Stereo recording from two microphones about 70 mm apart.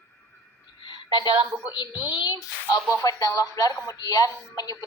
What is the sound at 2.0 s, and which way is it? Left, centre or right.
Speech, left.